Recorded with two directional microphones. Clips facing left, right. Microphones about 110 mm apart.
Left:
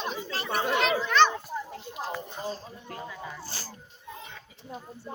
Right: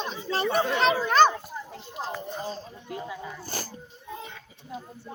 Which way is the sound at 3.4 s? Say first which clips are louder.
Right 6 dB; 50° right (ahead or behind).